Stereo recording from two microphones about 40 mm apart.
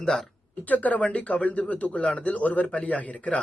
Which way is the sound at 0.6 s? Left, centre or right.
Left.